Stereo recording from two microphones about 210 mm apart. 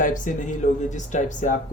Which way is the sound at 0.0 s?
40° left (ahead or behind).